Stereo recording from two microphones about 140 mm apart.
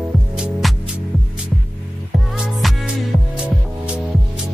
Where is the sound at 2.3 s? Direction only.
Centre (ahead or behind).